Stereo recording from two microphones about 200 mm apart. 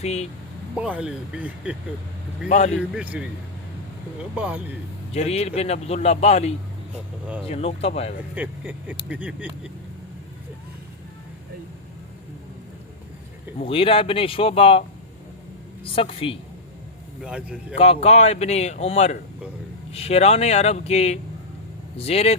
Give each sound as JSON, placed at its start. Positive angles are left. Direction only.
{"t": 0.0, "sound": "speech", "side_deg": 30}
{"t": 0.8, "sound": "speech", "side_deg": -5}
{"t": 2.5, "sound": "speech", "side_deg": 35}
{"t": 2.7, "sound": "speech", "side_deg": -5}
{"t": 4.4, "sound": "speech", "side_deg": -5}
{"t": 5.1, "sound": "speech", "side_deg": 30}
{"t": 8.4, "sound": "speech", "side_deg": -10}
{"t": 13.6, "sound": "speech", "side_deg": 30}
{"t": 17.2, "sound": "speech", "side_deg": -5}
{"t": 17.7, "sound": "speech", "side_deg": 30}